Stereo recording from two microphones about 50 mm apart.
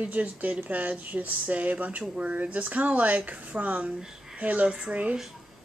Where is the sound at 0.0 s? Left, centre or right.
Right.